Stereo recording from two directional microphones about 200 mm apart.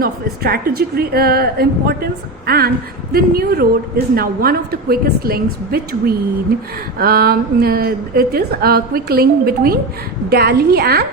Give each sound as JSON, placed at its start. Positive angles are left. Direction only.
{"t": 0.0, "sound": "a woman's voice", "side_deg": -50}